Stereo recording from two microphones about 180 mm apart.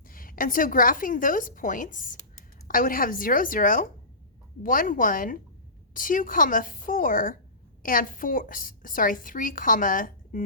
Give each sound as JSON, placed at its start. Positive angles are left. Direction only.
{"t": 0.1, "sound": "a woman's voice", "side_deg": 50}